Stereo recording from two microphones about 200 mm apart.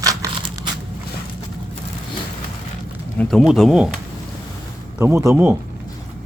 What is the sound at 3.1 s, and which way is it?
Speech, centre (ahead or behind).